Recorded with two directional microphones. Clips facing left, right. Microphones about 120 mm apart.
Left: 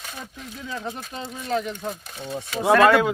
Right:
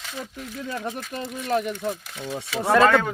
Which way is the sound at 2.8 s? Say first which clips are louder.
Left 1 dB; 10° left (ahead or behind).